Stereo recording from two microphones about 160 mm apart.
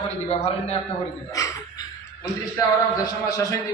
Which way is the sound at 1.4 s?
20° left (ahead or behind).